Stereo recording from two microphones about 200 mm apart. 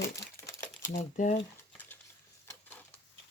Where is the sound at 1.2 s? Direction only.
40° left (ahead or behind).